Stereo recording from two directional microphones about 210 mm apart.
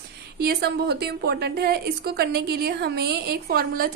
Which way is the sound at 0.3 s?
50° right (ahead or behind).